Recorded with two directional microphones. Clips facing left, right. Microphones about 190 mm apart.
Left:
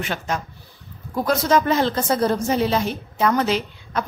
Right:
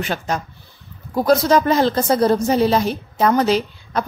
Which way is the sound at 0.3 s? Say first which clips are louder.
Right 3 dB; 35° right (ahead or behind).